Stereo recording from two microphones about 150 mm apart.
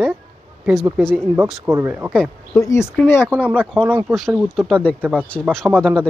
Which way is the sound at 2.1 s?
Centre (ahead or behind).